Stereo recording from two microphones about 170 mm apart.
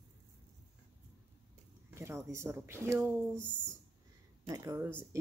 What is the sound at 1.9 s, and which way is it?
Speech, 15° right (ahead or behind).